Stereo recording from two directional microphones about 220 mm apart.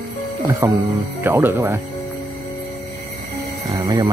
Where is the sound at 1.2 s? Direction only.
10° right (ahead or behind).